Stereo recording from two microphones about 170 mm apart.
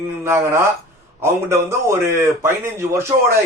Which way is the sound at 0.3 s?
15° right (ahead or behind).